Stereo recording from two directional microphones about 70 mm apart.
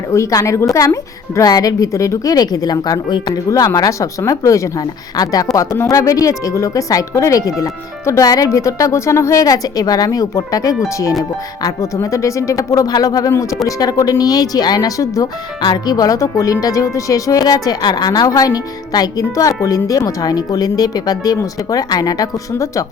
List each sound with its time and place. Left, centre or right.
0.1 s speech: left
1.4 s speech: left
4.8 s speech: left
22.5 s speech: left